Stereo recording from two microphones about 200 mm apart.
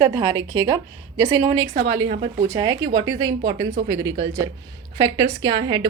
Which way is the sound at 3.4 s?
35° right (ahead or behind).